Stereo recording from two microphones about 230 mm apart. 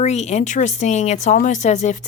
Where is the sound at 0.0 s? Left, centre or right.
Left.